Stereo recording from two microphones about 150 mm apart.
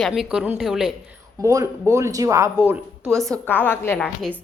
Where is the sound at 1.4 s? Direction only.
20° right (ahead or behind).